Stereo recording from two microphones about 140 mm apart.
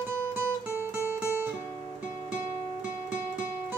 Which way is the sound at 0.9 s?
20° left (ahead or behind).